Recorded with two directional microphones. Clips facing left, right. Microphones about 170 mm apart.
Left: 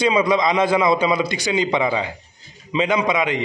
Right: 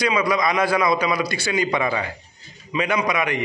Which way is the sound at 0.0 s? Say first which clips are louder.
Left 3 dB; 25° left (ahead or behind).